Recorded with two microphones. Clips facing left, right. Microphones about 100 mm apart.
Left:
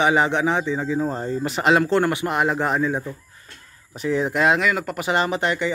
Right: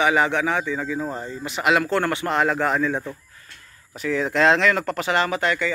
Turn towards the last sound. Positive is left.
turn(degrees=20)  # may be behind; listen again after turning